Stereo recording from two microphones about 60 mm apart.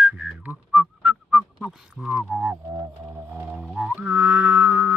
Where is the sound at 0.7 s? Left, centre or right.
Centre.